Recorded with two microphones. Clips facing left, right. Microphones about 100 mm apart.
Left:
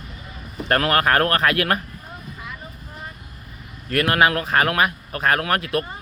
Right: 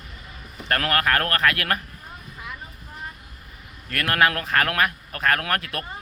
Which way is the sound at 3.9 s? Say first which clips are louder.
Left 4 dB; 15° left (ahead or behind).